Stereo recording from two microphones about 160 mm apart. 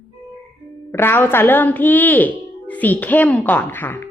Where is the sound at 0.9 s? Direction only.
15° left (ahead or behind).